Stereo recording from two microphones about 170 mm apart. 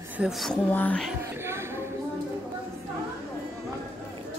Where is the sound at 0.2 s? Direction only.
Centre (ahead or behind).